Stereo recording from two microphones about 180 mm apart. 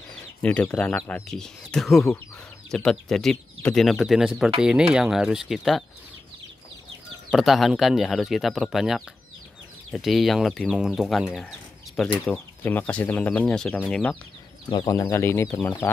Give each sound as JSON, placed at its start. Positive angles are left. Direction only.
{"t": 0.1, "sound": "speech", "side_deg": 5}
{"t": 7.2, "sound": "speech", "side_deg": 0}
{"t": 14.7, "sound": "speech", "side_deg": 25}